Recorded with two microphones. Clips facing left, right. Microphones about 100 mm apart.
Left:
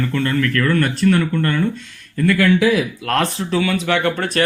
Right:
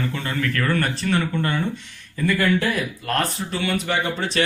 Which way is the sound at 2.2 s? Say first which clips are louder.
Left 6 dB; 90° left.